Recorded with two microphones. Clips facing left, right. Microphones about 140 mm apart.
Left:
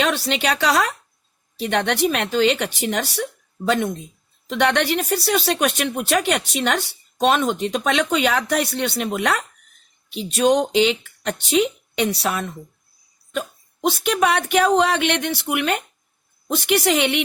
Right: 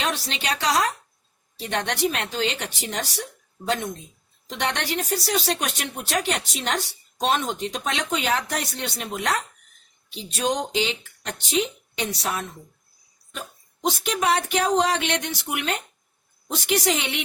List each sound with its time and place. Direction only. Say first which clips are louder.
0.0 s a woman's voice: left 7 dB; 65° left (ahead or behind)
13.8 s speech: left 4 dB; 65° left (ahead or behind)